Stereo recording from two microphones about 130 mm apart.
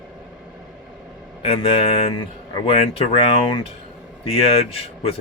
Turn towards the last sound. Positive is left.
turn(degrees=45)  # may be behind; listen again after turning